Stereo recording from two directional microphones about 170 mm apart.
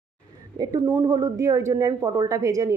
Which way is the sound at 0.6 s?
20° right (ahead or behind).